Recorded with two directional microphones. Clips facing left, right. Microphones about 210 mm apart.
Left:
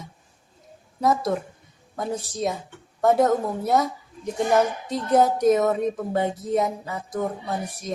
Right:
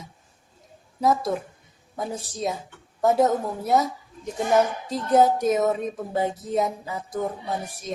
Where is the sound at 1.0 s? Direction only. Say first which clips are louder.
Even; centre (ahead or behind).